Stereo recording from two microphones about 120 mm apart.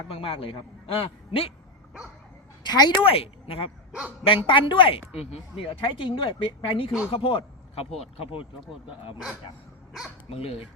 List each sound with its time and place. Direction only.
0.1 s speech: 50° left (ahead or behind)
2.6 s speech: 35° left (ahead or behind)
3.0 s speech: 50° left (ahead or behind)
10.2 s speech: 55° left (ahead or behind)